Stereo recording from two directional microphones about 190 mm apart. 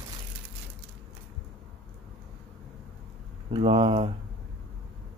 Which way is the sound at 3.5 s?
30° right (ahead or behind).